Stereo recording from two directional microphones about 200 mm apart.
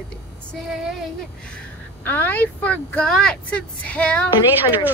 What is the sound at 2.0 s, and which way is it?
Speech, 10° left (ahead or behind).